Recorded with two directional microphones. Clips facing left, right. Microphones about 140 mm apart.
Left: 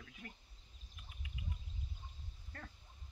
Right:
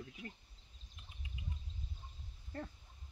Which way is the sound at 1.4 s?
25° right (ahead or behind).